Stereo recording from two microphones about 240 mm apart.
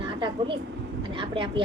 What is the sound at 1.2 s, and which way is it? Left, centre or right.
Speech, right.